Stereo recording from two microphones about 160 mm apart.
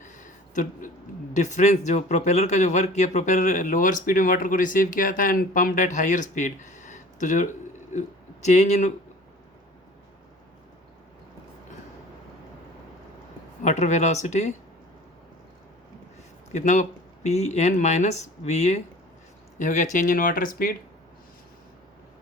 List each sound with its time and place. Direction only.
0.1 s a sound: 55° left (ahead or behind)
1.3 s a man's voice: 50° left (ahead or behind)
13.6 s a man's voice: 45° left (ahead or behind)
16.5 s a man's voice: 50° left (ahead or behind)